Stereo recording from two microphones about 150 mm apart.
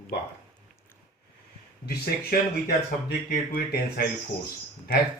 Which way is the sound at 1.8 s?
90° left.